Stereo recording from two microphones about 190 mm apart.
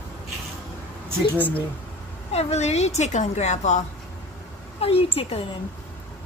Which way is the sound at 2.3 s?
35° left (ahead or behind).